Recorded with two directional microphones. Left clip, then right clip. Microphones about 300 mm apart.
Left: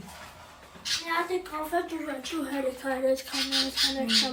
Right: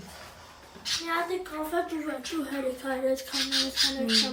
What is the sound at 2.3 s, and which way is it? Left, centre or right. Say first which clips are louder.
Speech: left 2 dB; centre.